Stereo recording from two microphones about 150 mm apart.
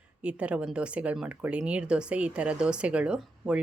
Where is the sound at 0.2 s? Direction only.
10° right (ahead or behind).